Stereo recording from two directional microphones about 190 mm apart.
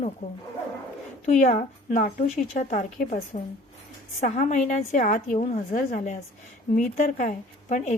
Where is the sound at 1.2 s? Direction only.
40° left (ahead or behind).